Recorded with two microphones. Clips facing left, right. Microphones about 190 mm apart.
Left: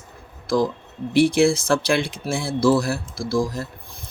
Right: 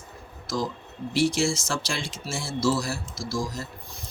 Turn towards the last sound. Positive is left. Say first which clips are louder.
# left 4 dB
turn(degrees=55)  # may be behind; listen again after turning